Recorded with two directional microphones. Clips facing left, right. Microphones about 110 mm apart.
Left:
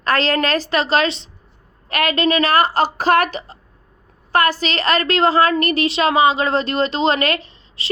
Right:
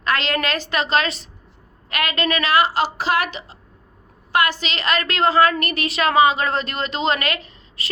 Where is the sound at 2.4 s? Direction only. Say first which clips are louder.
Left 2 dB; 45° left (ahead or behind); by 7.9 s 30° left (ahead or behind).